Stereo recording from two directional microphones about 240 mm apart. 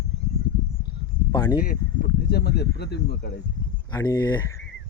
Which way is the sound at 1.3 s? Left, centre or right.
Centre.